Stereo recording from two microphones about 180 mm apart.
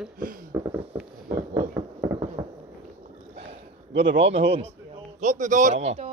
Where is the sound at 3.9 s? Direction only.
80° right.